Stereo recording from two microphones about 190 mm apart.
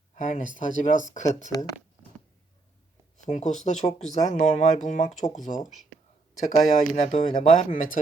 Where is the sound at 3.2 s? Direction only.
40° left (ahead or behind).